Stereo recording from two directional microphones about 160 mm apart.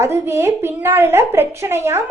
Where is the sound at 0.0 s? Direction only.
15° right (ahead or behind).